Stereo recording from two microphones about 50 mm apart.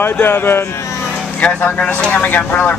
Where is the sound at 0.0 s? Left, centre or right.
Left.